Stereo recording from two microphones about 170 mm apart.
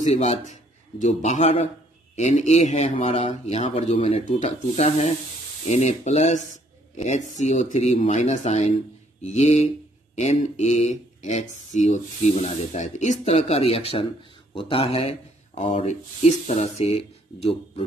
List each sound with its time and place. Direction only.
0.0 s a man's voice: 40° left (ahead or behind)